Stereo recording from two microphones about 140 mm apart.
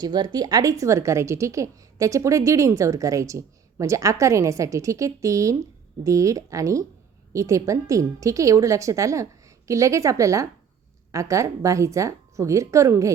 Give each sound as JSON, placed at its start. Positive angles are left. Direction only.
{"t": 0.0, "sound": "a woman's voice", "side_deg": -30}